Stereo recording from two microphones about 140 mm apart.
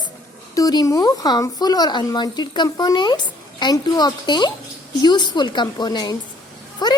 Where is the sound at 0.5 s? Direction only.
25° left (ahead or behind).